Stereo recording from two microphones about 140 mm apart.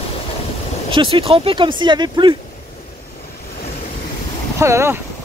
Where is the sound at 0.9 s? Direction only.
40° right (ahead or behind).